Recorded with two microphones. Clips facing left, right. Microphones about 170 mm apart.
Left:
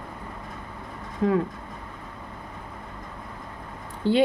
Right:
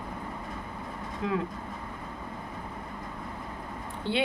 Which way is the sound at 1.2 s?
45° left (ahead or behind).